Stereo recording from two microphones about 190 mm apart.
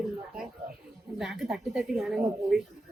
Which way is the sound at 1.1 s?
Centre (ahead or behind).